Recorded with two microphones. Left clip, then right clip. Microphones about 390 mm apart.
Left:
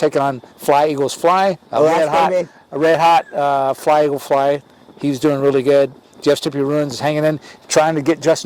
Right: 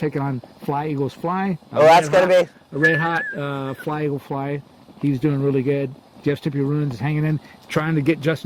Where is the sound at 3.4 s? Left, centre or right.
Left.